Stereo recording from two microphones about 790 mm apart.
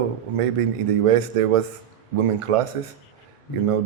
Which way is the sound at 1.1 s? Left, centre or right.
Right.